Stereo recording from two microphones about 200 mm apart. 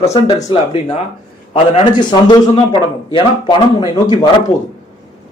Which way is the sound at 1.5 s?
25° left (ahead or behind).